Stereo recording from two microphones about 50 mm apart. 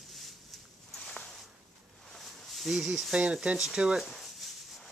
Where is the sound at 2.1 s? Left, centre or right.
Centre.